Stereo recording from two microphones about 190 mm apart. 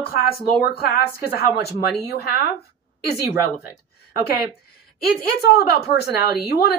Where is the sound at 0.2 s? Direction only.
55° left (ahead or behind).